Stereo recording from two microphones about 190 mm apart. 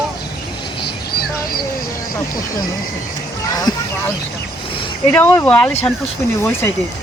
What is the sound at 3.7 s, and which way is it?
Speech, 20° left (ahead or behind).